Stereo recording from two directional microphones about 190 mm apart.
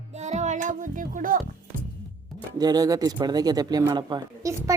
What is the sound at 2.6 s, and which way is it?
Speech, 20° right (ahead or behind).